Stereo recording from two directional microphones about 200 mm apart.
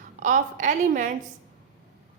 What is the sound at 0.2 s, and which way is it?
Speech, 40° right (ahead or behind).